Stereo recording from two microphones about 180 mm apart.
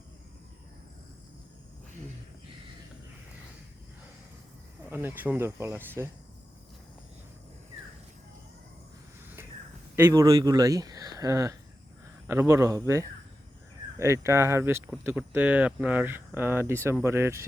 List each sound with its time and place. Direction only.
4.9 s speech: 10° right (ahead or behind)
9.9 s speech: 15° right (ahead or behind)